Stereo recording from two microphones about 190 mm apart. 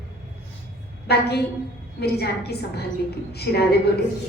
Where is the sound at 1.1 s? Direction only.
60° left (ahead or behind).